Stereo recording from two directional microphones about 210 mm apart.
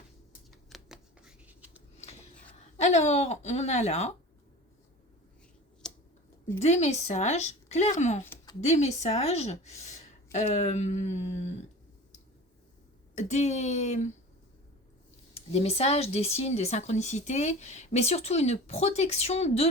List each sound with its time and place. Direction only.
0.5 s scissors: centre (ahead or behind)
2.8 s speech: 35° left (ahead or behind)
5.8 s a sound: 5° left (ahead or behind)
6.6 s speech: 30° left (ahead or behind)
8.2 s a sound: 10° left (ahead or behind)
8.6 s speech: 30° left (ahead or behind)
13.1 s speech: 35° left (ahead or behind)
15.4 s speech: 30° left (ahead or behind)